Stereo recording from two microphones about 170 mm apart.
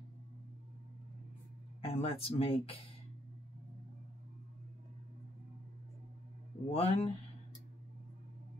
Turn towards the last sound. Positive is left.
turn(degrees=35)  # may be behind; listen again after turning